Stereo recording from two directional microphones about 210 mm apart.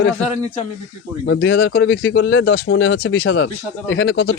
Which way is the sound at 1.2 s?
55° left (ahead or behind).